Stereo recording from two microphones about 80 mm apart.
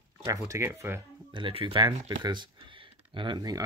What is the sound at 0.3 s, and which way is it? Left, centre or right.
Speech, right.